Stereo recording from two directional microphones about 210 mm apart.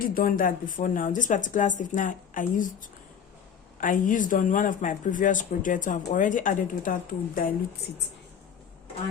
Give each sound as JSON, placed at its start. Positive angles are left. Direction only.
{"t": 0.1, "sound": "a woman's voice", "side_deg": 40}